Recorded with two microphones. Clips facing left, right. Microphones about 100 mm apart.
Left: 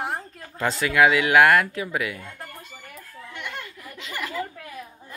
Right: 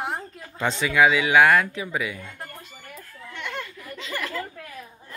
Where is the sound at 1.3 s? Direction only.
5° left (ahead or behind).